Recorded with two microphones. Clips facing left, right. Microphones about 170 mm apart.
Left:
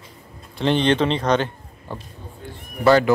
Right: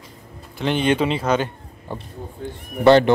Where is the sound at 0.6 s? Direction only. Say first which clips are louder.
Left 1 dB; 5° right (ahead or behind).